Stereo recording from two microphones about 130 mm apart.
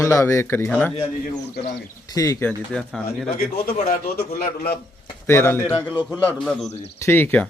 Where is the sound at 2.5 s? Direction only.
5° left (ahead or behind).